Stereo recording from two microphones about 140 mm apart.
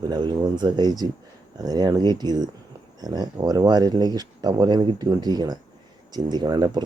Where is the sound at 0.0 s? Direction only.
30° right (ahead or behind).